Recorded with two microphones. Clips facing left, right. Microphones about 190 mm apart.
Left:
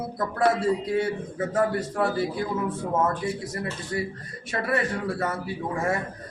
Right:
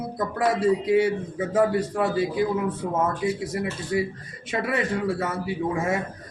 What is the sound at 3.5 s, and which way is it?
A man's voice, 15° right (ahead or behind).